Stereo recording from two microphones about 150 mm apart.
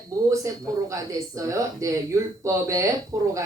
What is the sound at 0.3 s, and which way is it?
Speech, 20° right (ahead or behind).